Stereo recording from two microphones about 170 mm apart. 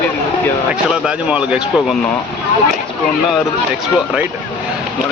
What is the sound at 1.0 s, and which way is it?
Speech, 5° right (ahead or behind).